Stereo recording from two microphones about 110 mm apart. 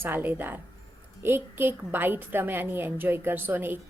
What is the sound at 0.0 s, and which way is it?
A woman's voice, 15° right (ahead or behind).